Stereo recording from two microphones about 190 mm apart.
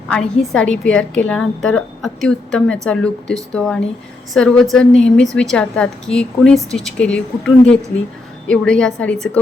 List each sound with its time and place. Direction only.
0.1 s speech: 5° left (ahead or behind)